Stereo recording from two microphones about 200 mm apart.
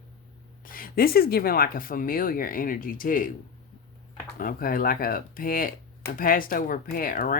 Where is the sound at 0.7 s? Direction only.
45° left (ahead or behind).